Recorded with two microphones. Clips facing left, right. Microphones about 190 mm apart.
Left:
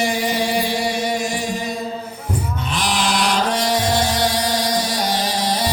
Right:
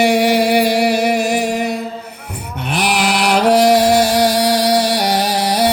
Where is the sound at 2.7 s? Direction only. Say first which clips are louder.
Right 5 dB; 65° right (ahead or behind).